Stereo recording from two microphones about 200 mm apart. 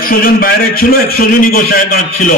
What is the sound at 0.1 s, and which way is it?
A man's voice, 45° left (ahead or behind).